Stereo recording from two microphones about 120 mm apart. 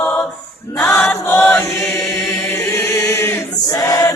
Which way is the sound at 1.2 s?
15° left (ahead or behind).